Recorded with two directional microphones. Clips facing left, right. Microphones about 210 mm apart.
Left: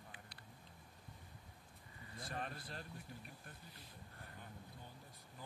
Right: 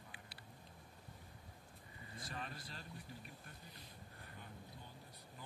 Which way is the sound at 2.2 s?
55° left (ahead or behind).